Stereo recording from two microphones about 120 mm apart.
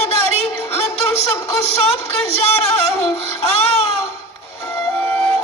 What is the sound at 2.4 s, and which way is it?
Music, 60° left (ahead or behind).